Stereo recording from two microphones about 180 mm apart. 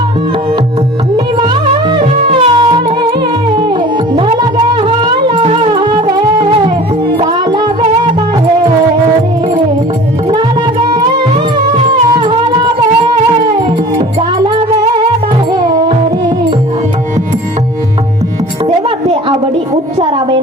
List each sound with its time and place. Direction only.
1.9 s music: 30° right (ahead or behind)
12.0 s music: 25° right (ahead or behind)
20.0 s a sound: 30° right (ahead or behind)